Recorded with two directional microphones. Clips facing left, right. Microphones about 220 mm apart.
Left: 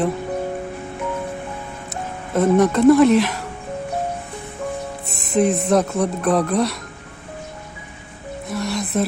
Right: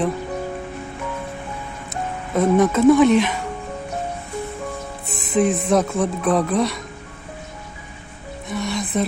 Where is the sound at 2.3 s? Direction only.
Centre (ahead or behind).